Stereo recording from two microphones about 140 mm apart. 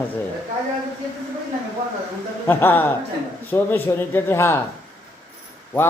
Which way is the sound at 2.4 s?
15° left (ahead or behind).